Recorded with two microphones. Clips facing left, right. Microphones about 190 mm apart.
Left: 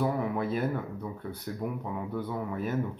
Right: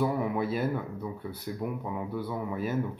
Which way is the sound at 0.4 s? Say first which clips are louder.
Right 1 dB; 10° right (ahead or behind).